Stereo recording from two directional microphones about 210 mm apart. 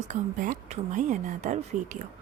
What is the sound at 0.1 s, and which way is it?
A woman's voice, 40° right (ahead or behind).